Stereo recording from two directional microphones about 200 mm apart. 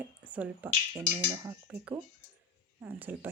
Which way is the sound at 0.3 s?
5° right (ahead or behind).